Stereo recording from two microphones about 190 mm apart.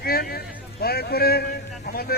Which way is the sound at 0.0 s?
55° left (ahead or behind).